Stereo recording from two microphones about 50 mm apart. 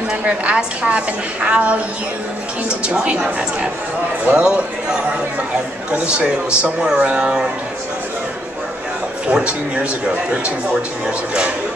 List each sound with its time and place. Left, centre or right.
0.2 s a man's voice: right
2.8 s a man's voice: right
5.9 s a man's voice: centre
9.3 s a man's voice: right